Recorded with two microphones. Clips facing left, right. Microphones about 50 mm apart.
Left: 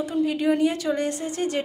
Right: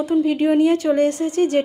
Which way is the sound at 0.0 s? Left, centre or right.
Right.